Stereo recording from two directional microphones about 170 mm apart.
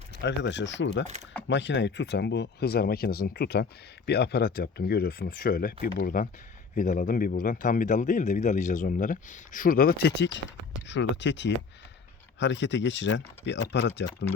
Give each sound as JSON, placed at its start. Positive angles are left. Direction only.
{"t": 0.2, "sound": "speech", "side_deg": 90}
{"t": 6.7, "sound": "a man's voice", "side_deg": 50}
{"t": 10.8, "sound": "speech", "side_deg": 90}